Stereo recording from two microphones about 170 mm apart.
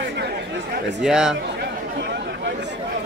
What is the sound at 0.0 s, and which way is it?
Chatter, 90° right.